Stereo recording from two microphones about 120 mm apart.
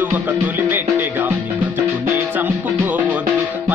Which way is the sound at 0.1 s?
15° right (ahead or behind).